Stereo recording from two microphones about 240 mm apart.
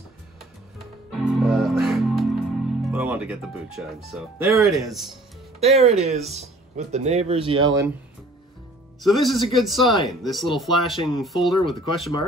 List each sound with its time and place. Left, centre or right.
0.7 s music: centre
4.6 s speech: centre
5.6 s speech: right
9.1 s speech: centre